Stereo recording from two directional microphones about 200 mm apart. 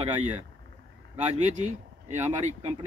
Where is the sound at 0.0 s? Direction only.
35° right (ahead or behind).